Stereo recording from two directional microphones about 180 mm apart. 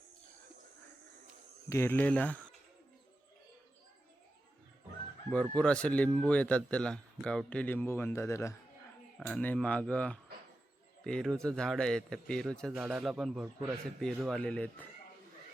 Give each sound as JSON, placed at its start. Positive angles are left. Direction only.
{"t": 1.7, "sound": "speech", "side_deg": 15}
{"t": 5.3, "sound": "speech", "side_deg": 5}
{"t": 9.1, "sound": "a man's voice", "side_deg": 5}